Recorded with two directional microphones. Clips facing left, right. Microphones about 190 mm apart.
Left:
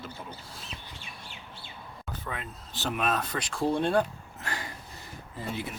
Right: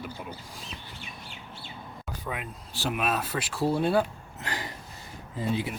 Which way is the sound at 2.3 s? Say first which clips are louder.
Right 3 dB; 10° right (ahead or behind).